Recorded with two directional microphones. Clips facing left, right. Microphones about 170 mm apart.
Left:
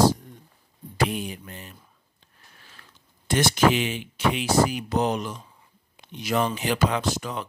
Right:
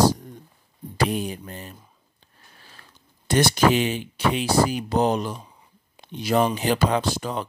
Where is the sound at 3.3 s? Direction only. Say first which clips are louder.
Right 2 dB; 35° right (ahead or behind).